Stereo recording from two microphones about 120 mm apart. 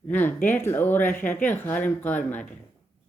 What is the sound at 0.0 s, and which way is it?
Speech, 15° left (ahead or behind).